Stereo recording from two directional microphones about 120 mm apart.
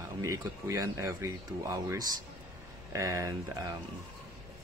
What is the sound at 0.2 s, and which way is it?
Speech, 30° right (ahead or behind).